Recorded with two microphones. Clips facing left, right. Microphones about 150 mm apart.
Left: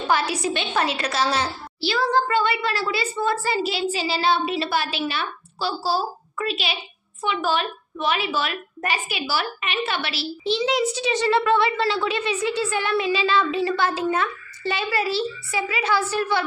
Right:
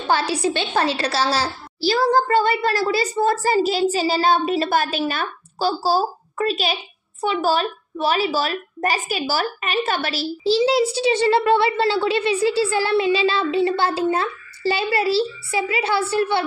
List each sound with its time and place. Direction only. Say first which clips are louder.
0.0 s a woman's voice: right 2 dB; 30° right (ahead or behind)